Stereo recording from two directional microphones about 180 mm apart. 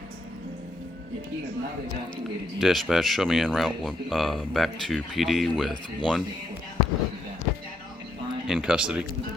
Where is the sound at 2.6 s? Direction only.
Centre (ahead or behind).